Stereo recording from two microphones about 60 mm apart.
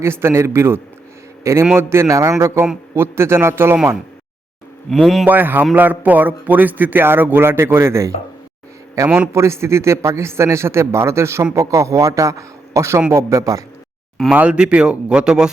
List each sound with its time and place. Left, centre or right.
0.0 s a man's voice: right
2.0 s a man's voice: right
2.9 s a man's voice: right
4.9 s speech: centre
5.2 s speech: right
9.0 s a man's voice: centre
9.3 s a man's voice: right
11.5 s a man's voice: right
14.3 s speech: centre